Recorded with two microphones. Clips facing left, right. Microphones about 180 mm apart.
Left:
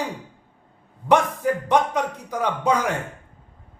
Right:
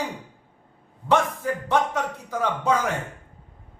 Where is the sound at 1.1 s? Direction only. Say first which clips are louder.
Left 3 dB; 15° left (ahead or behind).